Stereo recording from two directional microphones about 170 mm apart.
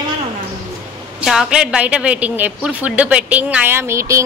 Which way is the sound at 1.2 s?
Centre (ahead or behind).